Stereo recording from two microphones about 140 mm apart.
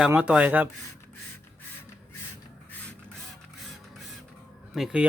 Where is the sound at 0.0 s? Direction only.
5° right (ahead or behind).